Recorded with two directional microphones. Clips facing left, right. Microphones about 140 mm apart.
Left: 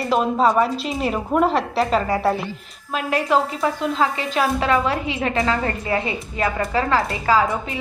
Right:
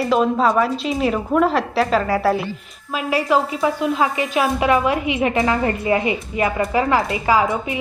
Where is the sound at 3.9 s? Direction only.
10° right (ahead or behind).